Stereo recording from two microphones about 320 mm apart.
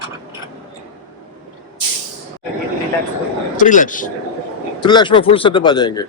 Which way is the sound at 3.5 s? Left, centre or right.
Left.